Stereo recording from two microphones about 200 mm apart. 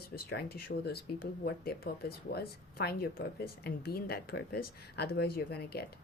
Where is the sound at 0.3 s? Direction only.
50° left (ahead or behind).